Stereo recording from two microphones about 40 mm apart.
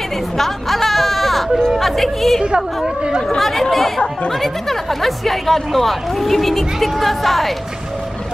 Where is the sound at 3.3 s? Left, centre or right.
Centre.